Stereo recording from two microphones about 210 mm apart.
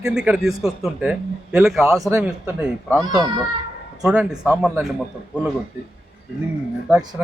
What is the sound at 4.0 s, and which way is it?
Speech, 5° right (ahead or behind).